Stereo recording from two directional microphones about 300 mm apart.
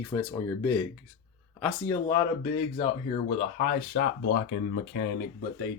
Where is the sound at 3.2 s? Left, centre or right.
Left.